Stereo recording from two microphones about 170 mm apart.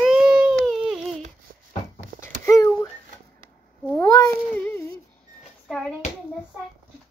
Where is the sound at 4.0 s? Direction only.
20° left (ahead or behind).